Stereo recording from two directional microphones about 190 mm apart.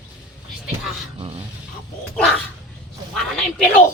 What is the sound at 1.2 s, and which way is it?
Dog, 30° right (ahead or behind).